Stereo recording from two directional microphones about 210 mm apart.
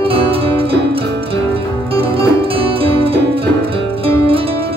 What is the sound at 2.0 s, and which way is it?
Music, 25° right (ahead or behind).